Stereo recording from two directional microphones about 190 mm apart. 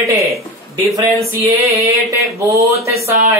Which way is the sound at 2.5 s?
15° right (ahead or behind).